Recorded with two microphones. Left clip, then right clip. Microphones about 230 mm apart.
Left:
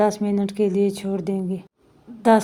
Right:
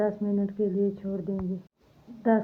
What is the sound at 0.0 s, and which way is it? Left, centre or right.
A woman's voice, left.